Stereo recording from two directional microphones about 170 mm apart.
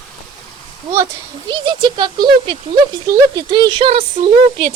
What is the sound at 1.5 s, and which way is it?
Speech, 25° right (ahead or behind).